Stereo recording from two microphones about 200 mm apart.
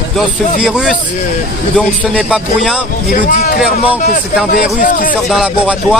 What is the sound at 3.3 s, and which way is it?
A man's voice, 45° left (ahead or behind).